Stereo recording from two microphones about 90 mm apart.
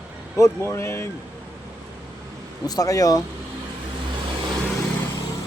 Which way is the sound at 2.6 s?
45° left (ahead or behind).